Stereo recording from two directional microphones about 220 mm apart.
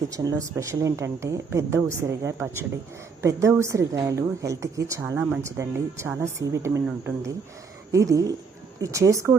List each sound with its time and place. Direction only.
0.2 s a woman's voice: 15° right (ahead or behind)